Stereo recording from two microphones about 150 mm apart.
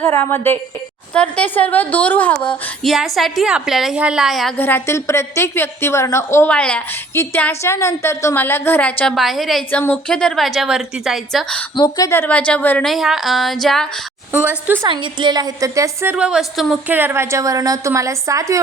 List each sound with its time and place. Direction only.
0.0 s a woman's voice: 15° left (ahead or behind)
2.8 s a woman's voice: centre (ahead or behind)
4.5 s a woman's voice: 15° left (ahead or behind)
6.5 s a woman's voice: 5° left (ahead or behind)
11.8 s a woman's voice: 25° left (ahead or behind); by 13.8 s centre (ahead or behind)
14.8 s a woman's voice: 30° right (ahead or behind)
16.1 s a woman's voice: 5° right (ahead or behind)
16.9 s a woman's voice: 15° right (ahead or behind)